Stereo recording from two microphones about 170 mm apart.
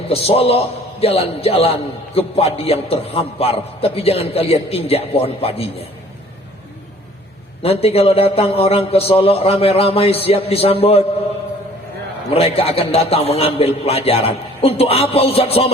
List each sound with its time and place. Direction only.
0.1 s a man's voice: 35° left (ahead or behind)
7.6 s a man's voice: 35° left (ahead or behind)
12.3 s a man's voice: 35° left (ahead or behind)